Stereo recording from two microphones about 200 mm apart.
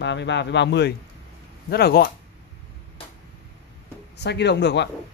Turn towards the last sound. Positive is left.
turn(degrees=60)  # may be behind; listen again after turning